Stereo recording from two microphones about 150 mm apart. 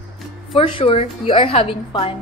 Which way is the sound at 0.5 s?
35° left (ahead or behind).